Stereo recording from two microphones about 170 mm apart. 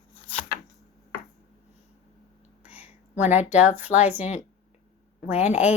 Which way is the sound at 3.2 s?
45° left (ahead or behind).